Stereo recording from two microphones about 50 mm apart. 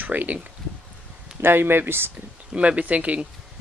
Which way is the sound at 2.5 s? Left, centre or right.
Right.